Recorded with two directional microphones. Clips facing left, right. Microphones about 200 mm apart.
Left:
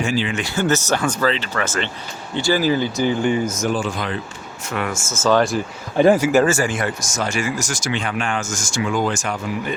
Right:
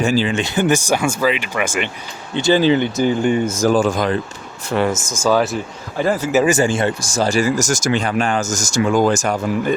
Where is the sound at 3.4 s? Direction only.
35° right (ahead or behind).